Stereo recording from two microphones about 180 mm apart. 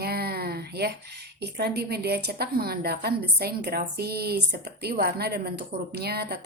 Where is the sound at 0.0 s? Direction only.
60° right (ahead or behind).